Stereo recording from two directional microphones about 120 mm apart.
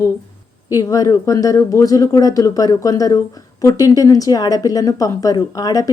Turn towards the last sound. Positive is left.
turn(degrees=30)  # may be behind; listen again after turning